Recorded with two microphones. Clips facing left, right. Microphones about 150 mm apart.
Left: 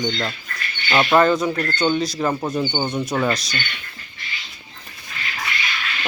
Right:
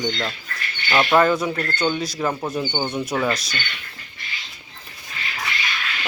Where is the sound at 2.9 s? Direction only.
5° right (ahead or behind).